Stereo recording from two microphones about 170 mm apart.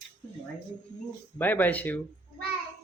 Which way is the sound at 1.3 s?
10° left (ahead or behind).